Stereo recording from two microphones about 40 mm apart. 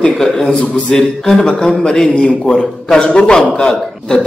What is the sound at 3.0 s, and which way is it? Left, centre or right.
A man's voice, left.